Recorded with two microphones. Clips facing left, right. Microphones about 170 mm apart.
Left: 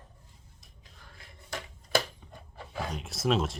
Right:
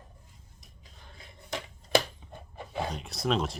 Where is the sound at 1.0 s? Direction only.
20° right (ahead or behind).